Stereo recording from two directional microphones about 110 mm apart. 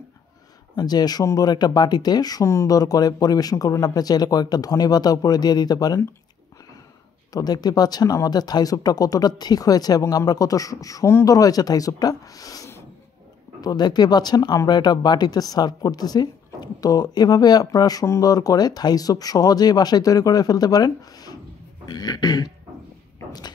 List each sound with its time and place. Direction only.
0.7 s speech: 40° left (ahead or behind)
7.3 s speech: 40° left (ahead or behind)